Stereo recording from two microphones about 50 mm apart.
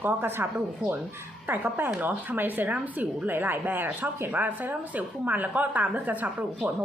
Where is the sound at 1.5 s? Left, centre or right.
Right.